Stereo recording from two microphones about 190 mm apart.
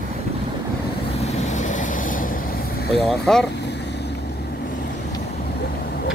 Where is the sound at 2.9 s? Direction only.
Centre (ahead or behind).